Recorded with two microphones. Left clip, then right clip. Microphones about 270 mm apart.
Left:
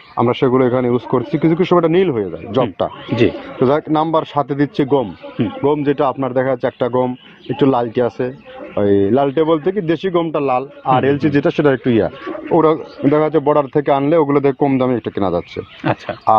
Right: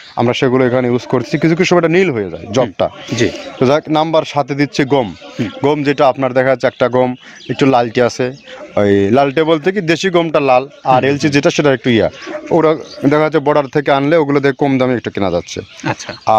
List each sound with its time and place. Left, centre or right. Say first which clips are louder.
0.2 s speech: right 1 dB; right
15.8 s speech: left 2 dB; centre